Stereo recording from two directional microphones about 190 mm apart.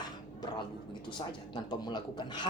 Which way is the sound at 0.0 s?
25° left (ahead or behind).